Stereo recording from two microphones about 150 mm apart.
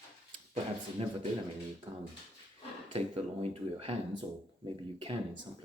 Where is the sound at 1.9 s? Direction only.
40° right (ahead or behind).